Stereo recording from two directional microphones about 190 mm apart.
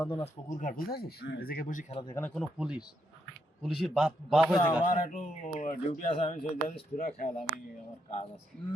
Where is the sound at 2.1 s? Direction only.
5° left (ahead or behind).